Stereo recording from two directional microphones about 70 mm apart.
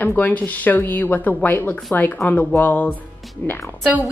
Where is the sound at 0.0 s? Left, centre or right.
Left.